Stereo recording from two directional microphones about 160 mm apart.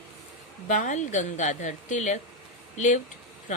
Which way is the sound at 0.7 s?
50° left (ahead or behind).